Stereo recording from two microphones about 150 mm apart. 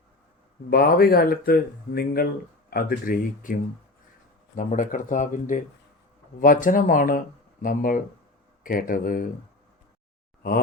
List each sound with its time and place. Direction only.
0.7 s speech: 90° left
2.6 s speech: 80° left
4.5 s speech: 60° left (ahead or behind)